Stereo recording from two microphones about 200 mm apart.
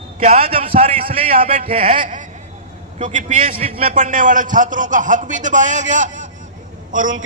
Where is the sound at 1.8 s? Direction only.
40° right (ahead or behind).